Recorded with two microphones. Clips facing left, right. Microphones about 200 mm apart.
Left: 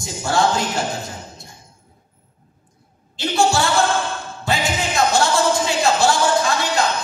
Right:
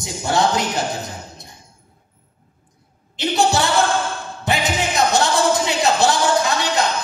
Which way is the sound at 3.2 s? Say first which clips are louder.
Even; 20° right (ahead or behind).